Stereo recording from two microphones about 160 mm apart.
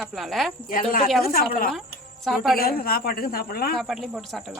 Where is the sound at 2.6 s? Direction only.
65° left (ahead or behind).